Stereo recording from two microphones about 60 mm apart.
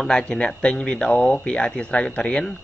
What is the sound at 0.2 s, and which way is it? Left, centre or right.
Speech, centre.